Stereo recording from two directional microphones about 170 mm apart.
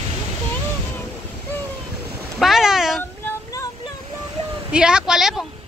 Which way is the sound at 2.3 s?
Centre (ahead or behind).